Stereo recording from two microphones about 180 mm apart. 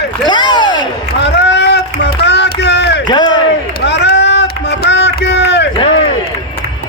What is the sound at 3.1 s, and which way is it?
Speech, 25° left (ahead or behind).